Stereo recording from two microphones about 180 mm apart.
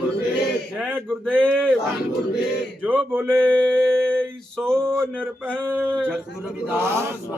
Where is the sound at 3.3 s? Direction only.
5° left (ahead or behind).